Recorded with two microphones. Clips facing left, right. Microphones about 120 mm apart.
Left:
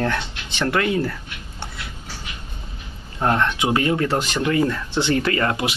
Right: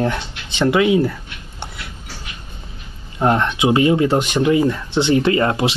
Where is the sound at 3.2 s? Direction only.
20° right (ahead or behind).